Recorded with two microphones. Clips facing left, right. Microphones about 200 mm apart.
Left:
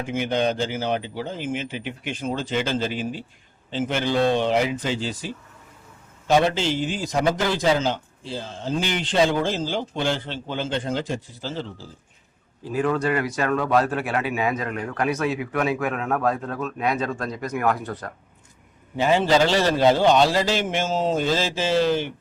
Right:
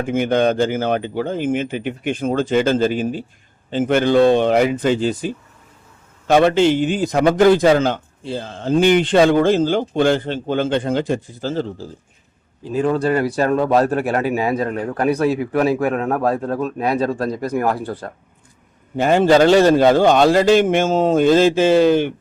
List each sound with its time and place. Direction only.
0.0 s a man's voice: 55° right (ahead or behind)
12.6 s speech: 25° right (ahead or behind)
18.9 s speech: 50° right (ahead or behind)